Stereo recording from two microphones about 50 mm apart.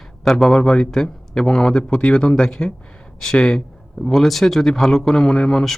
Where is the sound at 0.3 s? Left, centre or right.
Centre.